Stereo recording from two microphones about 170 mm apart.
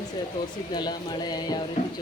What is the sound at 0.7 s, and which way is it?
Speech, 25° left (ahead or behind).